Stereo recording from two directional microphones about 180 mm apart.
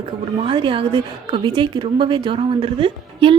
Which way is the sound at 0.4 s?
30° right (ahead or behind).